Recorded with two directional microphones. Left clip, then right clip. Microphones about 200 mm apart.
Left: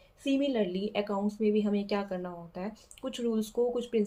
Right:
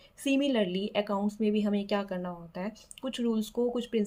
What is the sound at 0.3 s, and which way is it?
Speech, 25° right (ahead or behind).